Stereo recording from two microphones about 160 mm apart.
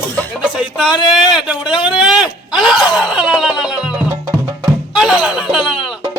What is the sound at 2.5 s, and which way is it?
Gasp, 5° right (ahead or behind).